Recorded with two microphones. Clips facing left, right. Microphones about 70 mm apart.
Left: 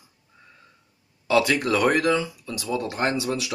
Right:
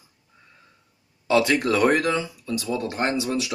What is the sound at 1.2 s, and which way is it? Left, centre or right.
Speech, right.